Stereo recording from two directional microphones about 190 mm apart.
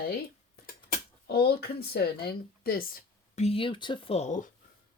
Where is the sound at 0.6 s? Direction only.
50° left (ahead or behind).